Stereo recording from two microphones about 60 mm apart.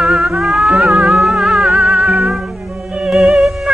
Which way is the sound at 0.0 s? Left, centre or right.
Centre.